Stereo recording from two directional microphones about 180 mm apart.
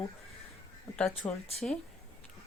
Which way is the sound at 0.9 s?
5° left (ahead or behind).